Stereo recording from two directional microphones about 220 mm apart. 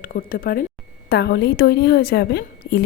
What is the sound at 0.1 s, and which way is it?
A woman's voice, 40° left (ahead or behind).